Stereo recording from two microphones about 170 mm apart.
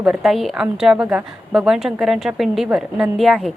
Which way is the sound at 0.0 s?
Centre (ahead or behind).